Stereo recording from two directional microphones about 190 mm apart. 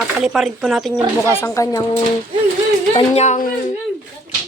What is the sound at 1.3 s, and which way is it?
Speech, 15° left (ahead or behind).